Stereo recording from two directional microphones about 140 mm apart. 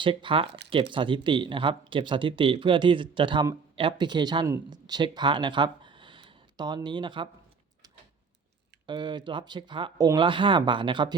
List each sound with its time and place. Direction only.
0.0 s speech: 35° right (ahead or behind)
8.9 s speech: 35° right (ahead or behind)